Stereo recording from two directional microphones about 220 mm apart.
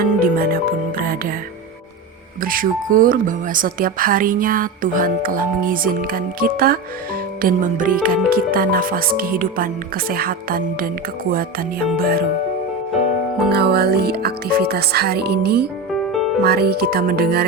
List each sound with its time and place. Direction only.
0.0 s speech: 40° right (ahead or behind)
0.9 s music: 40° right (ahead or behind)
2.4 s speech: 40° right (ahead or behind)
13.5 s speech: 45° right (ahead or behind)
16.1 s music: centre (ahead or behind)
16.4 s speech: 45° right (ahead or behind)